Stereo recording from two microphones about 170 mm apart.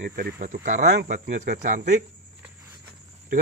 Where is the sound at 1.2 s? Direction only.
50° right (ahead or behind).